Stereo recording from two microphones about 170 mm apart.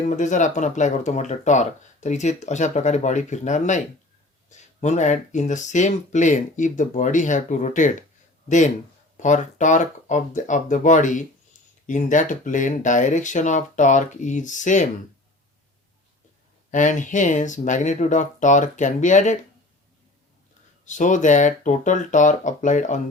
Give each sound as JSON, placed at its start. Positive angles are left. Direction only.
{"t": 0.2, "sound": "speech", "side_deg": 45}
{"t": 16.7, "sound": "speech", "side_deg": 45}
{"t": 20.8, "sound": "speech", "side_deg": 45}